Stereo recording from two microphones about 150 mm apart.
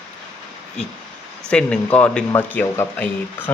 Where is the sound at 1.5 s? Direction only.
10° left (ahead or behind).